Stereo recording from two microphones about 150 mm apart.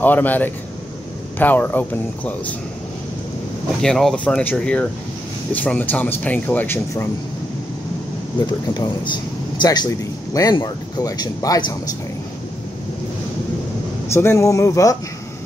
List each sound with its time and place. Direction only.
0.0 s speech: 10° left (ahead or behind)
3.8 s speech: 5° left (ahead or behind)
8.7 s speech: 30° left (ahead or behind)
14.0 s speech: 15° left (ahead or behind)